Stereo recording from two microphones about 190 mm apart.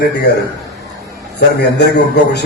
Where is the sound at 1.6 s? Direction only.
60° left (ahead or behind).